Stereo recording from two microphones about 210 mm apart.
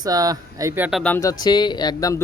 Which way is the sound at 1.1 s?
15° left (ahead or behind).